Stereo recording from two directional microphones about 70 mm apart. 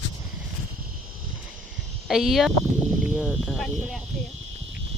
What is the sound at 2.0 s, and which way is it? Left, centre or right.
Speech, centre.